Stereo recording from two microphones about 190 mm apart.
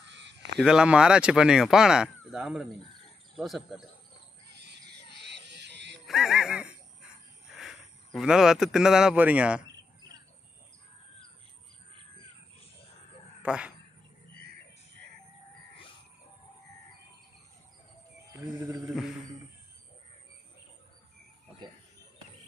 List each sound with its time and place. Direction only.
0.0 s sheep: 70° right (ahead or behind)
0.6 s speech: 5° right (ahead or behind)
4.6 s a sound: 60° right (ahead or behind)
6.0 s speech: centre (ahead or behind)
7.5 s cricket: centre (ahead or behind)
8.1 s speech: centre (ahead or behind)
13.4 s speech: 5° right (ahead or behind)
18.4 s wild animals: 20° right (ahead or behind)
18.9 s speech: centre (ahead or behind)